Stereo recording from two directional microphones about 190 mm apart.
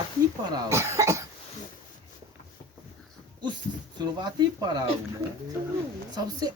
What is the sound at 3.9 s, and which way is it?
Speech, 20° right (ahead or behind).